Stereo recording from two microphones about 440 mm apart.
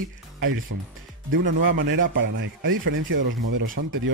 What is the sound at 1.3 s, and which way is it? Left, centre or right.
Speech, right.